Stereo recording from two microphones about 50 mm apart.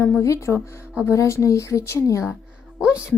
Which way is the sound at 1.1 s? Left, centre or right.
Left.